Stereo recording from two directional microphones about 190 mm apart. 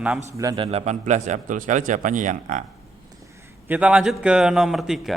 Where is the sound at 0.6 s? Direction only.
35° right (ahead or behind).